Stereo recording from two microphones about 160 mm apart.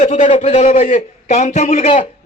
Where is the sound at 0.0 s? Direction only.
50° left (ahead or behind).